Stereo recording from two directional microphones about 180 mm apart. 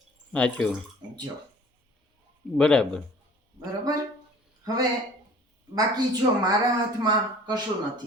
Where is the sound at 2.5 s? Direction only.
5° left (ahead or behind).